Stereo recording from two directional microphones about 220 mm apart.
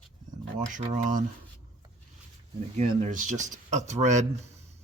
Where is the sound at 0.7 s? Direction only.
35° right (ahead or behind).